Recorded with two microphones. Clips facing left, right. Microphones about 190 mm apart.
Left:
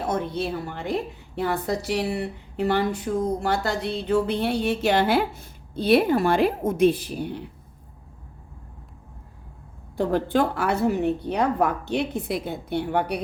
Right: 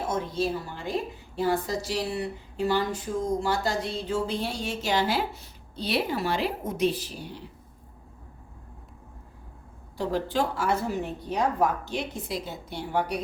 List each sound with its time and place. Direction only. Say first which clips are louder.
0.1 s a woman's voice: left 1 dB; 60° left (ahead or behind)
10.0 s a woman's voice: left 5 dB; 55° left (ahead or behind)